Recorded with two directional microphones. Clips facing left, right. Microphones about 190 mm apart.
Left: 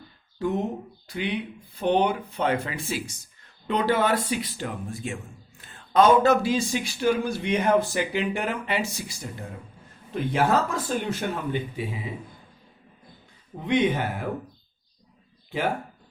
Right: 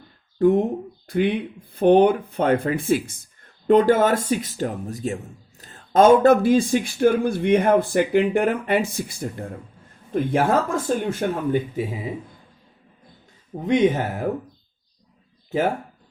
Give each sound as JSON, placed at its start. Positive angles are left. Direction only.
{"t": 0.3, "sound": "speech", "side_deg": -55}
{"t": 13.6, "sound": "speech", "side_deg": -45}